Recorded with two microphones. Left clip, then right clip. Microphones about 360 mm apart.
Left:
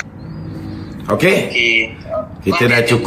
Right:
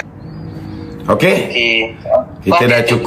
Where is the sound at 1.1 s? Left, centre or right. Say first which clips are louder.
Right 2 dB; centre.